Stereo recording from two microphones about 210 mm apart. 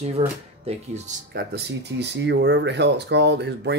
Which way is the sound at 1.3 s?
50° right (ahead or behind).